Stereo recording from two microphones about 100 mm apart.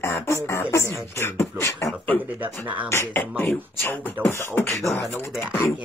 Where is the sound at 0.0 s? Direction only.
30° left (ahead or behind).